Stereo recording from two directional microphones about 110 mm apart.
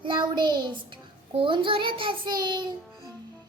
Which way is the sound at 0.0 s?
45° right (ahead or behind).